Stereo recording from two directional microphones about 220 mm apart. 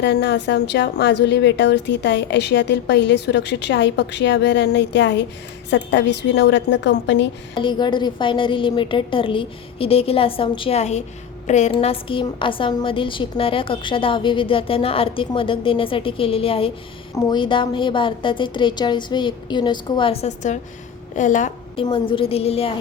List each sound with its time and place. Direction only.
0.0 s a woman's voice: 50° left (ahead or behind)
7.5 s a woman's voice: 20° left (ahead or behind)
21.8 s a woman's voice: 25° left (ahead or behind)